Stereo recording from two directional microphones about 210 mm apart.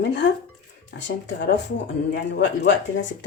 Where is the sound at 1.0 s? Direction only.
60° left (ahead or behind).